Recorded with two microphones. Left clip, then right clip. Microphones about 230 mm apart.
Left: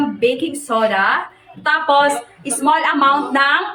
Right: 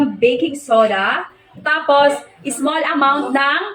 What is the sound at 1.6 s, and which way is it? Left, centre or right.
Speech, centre.